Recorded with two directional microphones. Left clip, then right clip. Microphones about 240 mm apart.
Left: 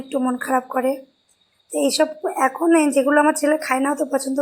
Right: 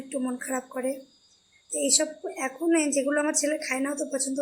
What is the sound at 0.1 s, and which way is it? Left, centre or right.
A woman's voice, centre.